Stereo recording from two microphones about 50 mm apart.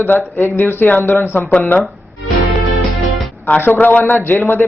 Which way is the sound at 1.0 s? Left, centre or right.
Left.